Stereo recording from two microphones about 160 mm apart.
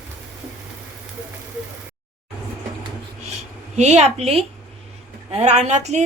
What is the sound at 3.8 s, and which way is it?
A woman's voice, 45° right (ahead or behind).